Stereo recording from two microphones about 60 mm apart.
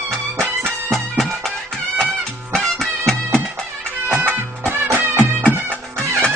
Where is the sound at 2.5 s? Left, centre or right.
Centre.